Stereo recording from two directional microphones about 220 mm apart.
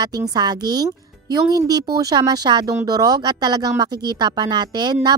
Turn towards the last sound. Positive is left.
turn(degrees=-20)  # may be behind; listen again after turning